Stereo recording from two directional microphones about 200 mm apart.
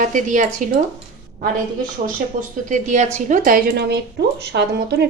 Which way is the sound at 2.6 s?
35° right (ahead or behind).